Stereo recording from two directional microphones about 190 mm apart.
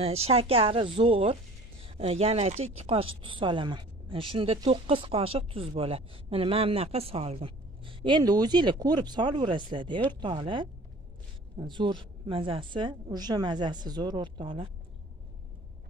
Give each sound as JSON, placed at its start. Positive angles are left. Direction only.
{"t": 0.0, "sound": "a woman's voice", "side_deg": -30}